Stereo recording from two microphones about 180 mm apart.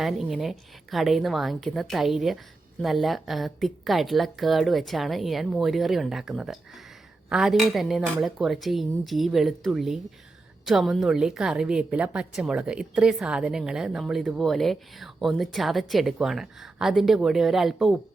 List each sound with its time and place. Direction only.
0.0 s a woman's voice: centre (ahead or behind)